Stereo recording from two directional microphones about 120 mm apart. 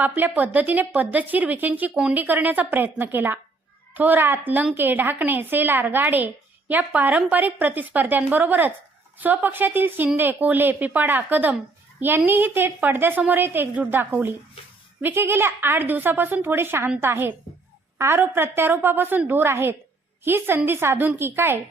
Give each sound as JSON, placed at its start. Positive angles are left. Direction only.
{"t": 0.0, "sound": "a woman's voice", "side_deg": -15}